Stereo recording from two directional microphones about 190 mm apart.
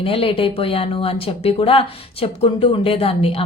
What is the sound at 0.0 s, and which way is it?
A woman's voice, 30° left (ahead or behind).